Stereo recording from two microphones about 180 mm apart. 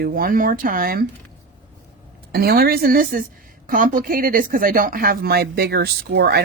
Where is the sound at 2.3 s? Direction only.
55° right (ahead or behind).